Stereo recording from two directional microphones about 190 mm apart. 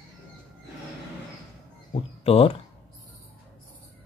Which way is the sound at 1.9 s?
30° left (ahead or behind).